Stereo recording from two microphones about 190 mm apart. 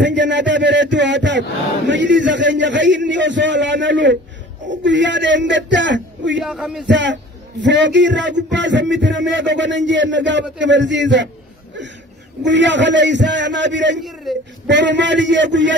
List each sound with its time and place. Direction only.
0.0 s a man's voice: 70° right (ahead or behind)
6.4 s speech: centre (ahead or behind)
6.9 s a man's voice: 70° right (ahead or behind)
12.4 s a man's voice: 70° right (ahead or behind)
14.3 s speech: centre (ahead or behind)
14.7 s a man's voice: 70° right (ahead or behind)